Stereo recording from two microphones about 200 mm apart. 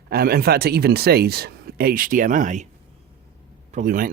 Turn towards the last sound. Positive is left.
turn(degrees=-45)  # may be behind; listen again after turning